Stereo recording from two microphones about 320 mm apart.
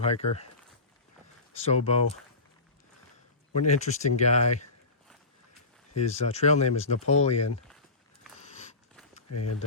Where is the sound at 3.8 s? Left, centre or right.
Left.